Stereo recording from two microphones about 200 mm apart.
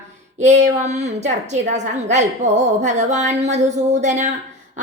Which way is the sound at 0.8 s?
35° right (ahead or behind).